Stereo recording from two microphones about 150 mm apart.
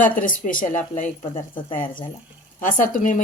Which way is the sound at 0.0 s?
60° left (ahead or behind).